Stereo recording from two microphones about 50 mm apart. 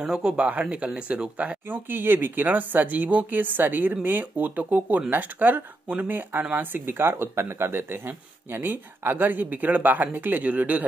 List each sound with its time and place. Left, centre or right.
0.0 s speech: centre
1.7 s speech: right